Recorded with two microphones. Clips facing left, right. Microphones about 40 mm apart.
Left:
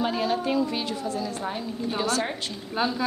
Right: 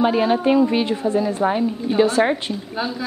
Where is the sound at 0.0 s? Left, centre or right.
Right.